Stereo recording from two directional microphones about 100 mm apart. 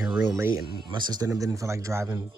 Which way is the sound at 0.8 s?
50° right (ahead or behind).